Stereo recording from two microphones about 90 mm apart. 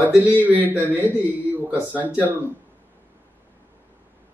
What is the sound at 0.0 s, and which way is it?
A man's voice, 15° right (ahead or behind).